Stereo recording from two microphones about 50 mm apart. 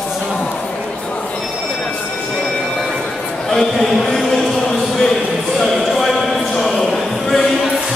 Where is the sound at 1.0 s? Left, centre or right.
Left.